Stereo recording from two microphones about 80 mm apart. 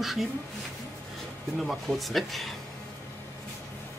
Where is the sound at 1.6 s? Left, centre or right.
Centre.